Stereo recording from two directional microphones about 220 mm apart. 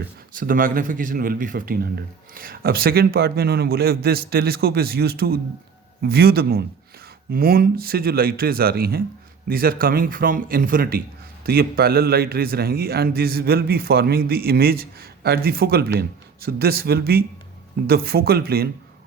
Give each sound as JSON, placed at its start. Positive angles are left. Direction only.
{"t": 0.3, "sound": "a man's voice", "side_deg": -40}